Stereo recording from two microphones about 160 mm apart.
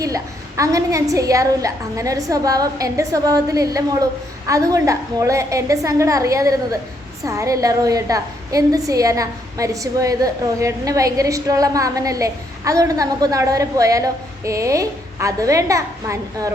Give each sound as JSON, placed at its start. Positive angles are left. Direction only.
{"t": 0.0, "sound": "a woman's voice", "side_deg": -20}